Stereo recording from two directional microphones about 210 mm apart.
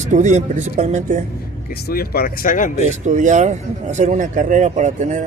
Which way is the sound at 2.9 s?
35° right (ahead or behind).